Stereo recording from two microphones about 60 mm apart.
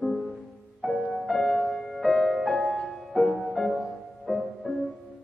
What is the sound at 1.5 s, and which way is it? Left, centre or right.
Music, centre.